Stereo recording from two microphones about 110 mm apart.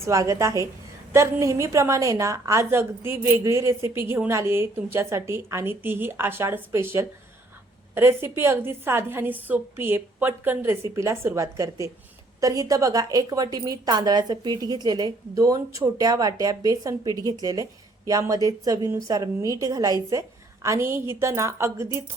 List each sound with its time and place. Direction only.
0.0 s a woman's voice: 30° right (ahead or behind)